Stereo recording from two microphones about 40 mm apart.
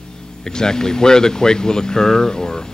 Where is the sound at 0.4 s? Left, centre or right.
Centre.